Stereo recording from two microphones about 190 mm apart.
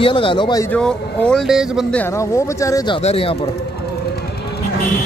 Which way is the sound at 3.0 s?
30° left (ahead or behind).